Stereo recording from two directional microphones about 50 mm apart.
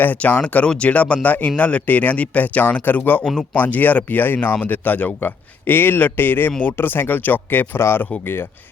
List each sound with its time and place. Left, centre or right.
0.2 s speech: left
5.6 s speech: left
7.8 s speech: left